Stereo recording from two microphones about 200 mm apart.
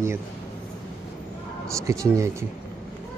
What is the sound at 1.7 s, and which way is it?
Speech, 15° right (ahead or behind).